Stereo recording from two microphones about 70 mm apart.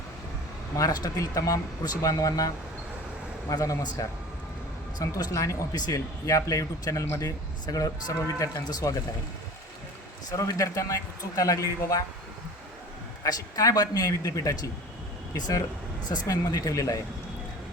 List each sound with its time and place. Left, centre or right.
0.8 s speech: left
3.5 s speech: left
10.2 s speech: left
13.2 s speech: left